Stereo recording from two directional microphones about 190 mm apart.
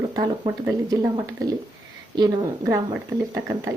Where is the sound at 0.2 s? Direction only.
20° right (ahead or behind).